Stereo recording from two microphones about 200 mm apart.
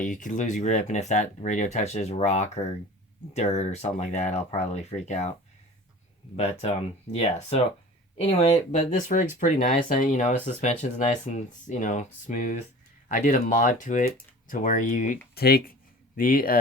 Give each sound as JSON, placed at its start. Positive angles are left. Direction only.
{"t": 0.0, "sound": "speech", "side_deg": 40}
{"t": 6.3, "sound": "speech", "side_deg": 30}